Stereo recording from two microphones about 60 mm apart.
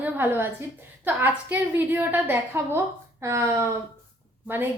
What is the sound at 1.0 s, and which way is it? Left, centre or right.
A woman's voice, right.